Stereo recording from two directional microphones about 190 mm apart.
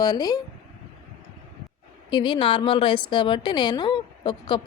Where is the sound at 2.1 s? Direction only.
25° left (ahead or behind).